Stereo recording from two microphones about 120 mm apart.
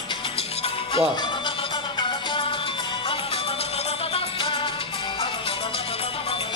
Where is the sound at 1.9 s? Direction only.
45° left (ahead or behind).